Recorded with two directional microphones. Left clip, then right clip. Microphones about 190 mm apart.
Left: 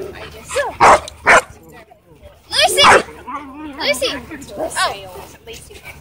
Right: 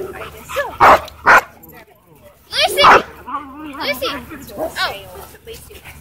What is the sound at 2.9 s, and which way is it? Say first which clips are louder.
Dog: right 1 dB; 10° left (ahead or behind).